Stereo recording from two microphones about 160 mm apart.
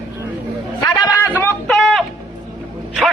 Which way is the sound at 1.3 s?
15° left (ahead or behind).